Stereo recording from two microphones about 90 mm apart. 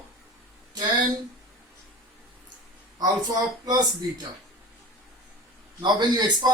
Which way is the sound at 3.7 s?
50° right (ahead or behind).